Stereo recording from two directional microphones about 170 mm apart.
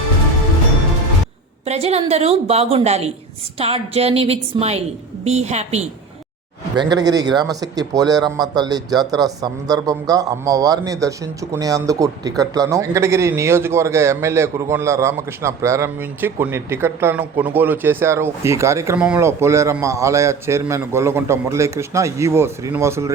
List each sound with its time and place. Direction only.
1.6 s a woman's voice: 40° right (ahead or behind)
6.7 s a man's voice: 25° right (ahead or behind)